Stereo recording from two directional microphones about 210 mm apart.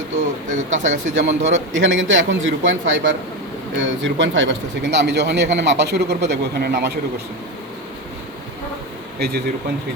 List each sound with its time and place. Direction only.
0.5 s speech: 35° right (ahead or behind)
1.8 s speech: 60° right (ahead or behind)
9.1 s speech: 50° right (ahead or behind)